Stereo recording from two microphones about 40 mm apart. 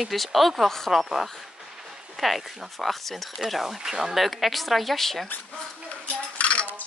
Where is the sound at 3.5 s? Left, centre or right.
Centre.